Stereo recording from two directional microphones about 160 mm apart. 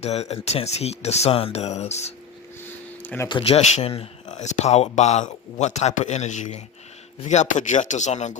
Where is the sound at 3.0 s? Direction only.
15° left (ahead or behind).